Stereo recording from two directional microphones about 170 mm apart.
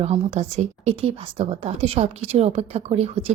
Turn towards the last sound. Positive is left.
turn(degrees=-35)  # may be behind; listen again after turning